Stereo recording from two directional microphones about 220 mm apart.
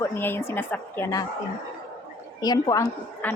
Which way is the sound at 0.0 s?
10° left (ahead or behind).